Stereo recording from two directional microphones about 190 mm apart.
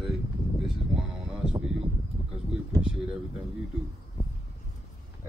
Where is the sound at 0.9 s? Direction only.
5° right (ahead or behind).